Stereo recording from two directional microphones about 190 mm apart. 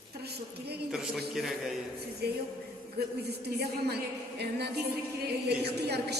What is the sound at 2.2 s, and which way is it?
A woman's voice, 55° right (ahead or behind).